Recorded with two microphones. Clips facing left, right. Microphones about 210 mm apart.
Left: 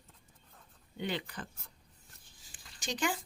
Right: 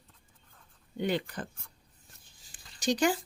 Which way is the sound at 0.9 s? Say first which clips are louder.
Right 6 dB; 45° right (ahead or behind).